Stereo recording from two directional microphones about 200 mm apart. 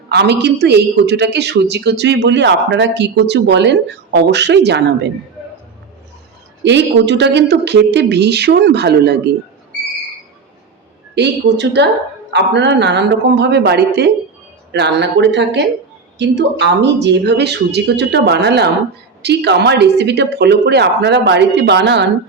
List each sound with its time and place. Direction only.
0.1 s speech: 55° right (ahead or behind)
6.7 s speech: 60° right (ahead or behind)
11.1 s speech: 60° right (ahead or behind)